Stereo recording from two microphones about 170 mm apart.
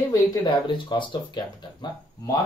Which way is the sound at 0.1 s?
25° left (ahead or behind).